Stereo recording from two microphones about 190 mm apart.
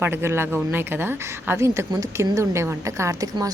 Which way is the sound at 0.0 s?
10° right (ahead or behind).